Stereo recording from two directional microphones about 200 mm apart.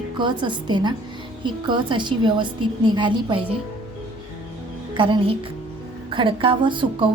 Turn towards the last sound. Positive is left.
turn(degrees=-25)  # may be behind; listen again after turning